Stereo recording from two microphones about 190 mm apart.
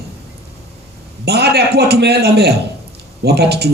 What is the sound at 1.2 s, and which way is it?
A man's voice, 60° right (ahead or behind).